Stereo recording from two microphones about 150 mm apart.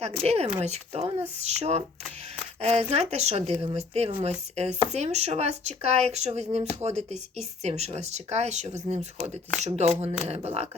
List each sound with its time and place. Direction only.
0.3 s speech: 45° right (ahead or behind)